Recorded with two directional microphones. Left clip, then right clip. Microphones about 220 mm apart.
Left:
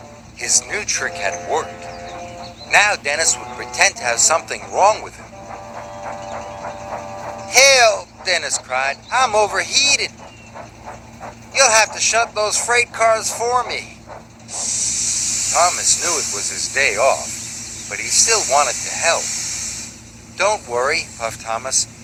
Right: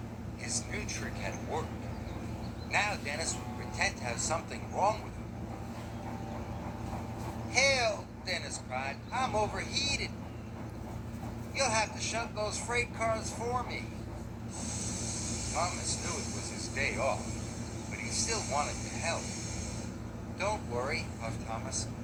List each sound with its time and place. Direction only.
0.3 s speech: 50° left (ahead or behind)
2.6 s speech: 45° left (ahead or behind)
7.5 s speech: 45° left (ahead or behind)
11.5 s speech: 45° left (ahead or behind)
14.5 s snake: 50° left (ahead or behind)
20.4 s speech: 50° left (ahead or behind)